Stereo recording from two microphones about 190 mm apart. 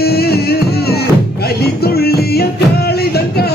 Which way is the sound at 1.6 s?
55° left (ahead or behind).